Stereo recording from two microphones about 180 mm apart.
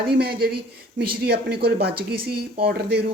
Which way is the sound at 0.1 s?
60° right (ahead or behind).